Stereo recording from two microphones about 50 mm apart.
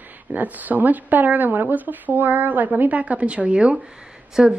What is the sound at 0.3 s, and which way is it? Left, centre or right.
A woman's voice, right.